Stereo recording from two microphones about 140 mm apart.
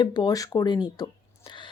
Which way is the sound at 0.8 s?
30° left (ahead or behind).